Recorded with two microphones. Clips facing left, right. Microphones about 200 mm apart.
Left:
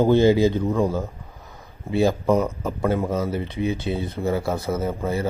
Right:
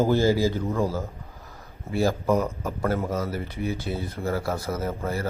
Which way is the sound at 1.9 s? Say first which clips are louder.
Left 4 dB; 20° left (ahead or behind).